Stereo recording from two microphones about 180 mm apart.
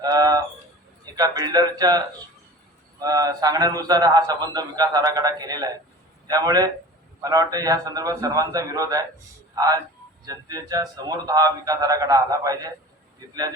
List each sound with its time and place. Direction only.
0.0 s a sound: 20° right (ahead or behind)
1.1 s a man's voice: 20° right (ahead or behind)
3.0 s a man's voice: 20° right (ahead or behind)